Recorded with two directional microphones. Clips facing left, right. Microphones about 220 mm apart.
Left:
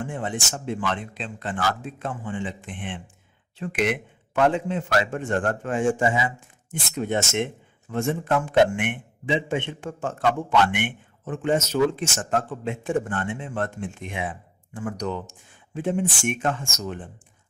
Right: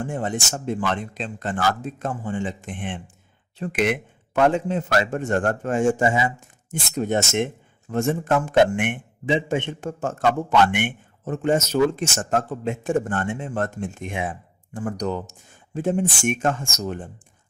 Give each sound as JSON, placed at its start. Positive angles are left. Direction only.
{"t": 0.0, "sound": "a man's voice", "side_deg": -40}